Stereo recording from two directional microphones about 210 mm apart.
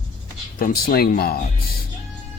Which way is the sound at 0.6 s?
45° left (ahead or behind).